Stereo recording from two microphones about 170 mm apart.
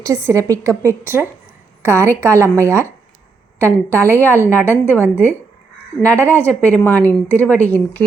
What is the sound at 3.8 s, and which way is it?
A woman's voice, 10° left (ahead or behind).